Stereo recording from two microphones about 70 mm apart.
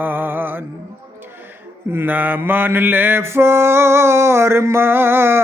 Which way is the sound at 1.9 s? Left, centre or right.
Right.